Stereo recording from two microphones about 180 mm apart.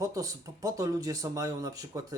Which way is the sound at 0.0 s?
20° right (ahead or behind).